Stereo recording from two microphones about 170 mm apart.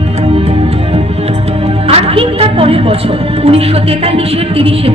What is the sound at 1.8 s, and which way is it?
Music, 35° right (ahead or behind).